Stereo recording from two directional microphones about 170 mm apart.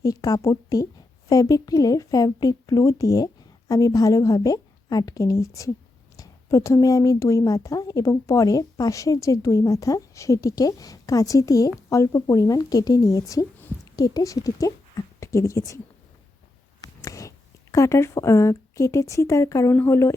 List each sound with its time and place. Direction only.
0.0 s a woman's voice: 20° left (ahead or behind)
17.0 s speech: 20° left (ahead or behind)